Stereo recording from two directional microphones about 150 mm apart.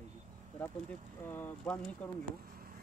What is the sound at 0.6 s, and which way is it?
Speech, 10° left (ahead or behind).